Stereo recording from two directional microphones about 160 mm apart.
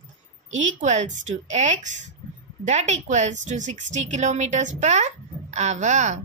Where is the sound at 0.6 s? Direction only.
50° right (ahead or behind).